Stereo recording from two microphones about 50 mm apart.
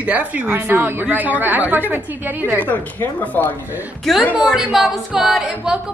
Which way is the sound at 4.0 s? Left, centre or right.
Centre.